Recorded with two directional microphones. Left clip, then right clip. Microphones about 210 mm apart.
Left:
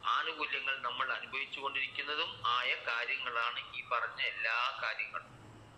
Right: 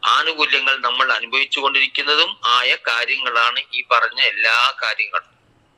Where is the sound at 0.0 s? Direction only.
50° right (ahead or behind).